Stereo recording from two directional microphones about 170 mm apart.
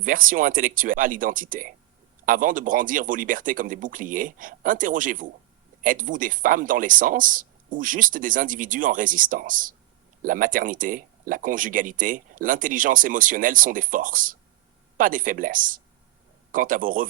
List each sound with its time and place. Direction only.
0.0 s speech: 55° right (ahead or behind)